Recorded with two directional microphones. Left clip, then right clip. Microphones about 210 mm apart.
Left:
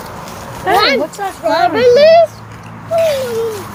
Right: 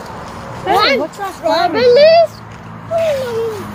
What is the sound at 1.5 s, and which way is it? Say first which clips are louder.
Speech: left 1 dB; centre (ahead or behind).